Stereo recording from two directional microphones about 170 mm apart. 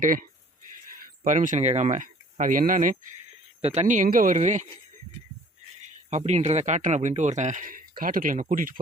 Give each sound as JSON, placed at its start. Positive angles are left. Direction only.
{"t": 0.0, "sound": "speech", "side_deg": -55}
{"t": 3.6, "sound": "speech", "side_deg": -40}
{"t": 6.1, "sound": "speech", "side_deg": -40}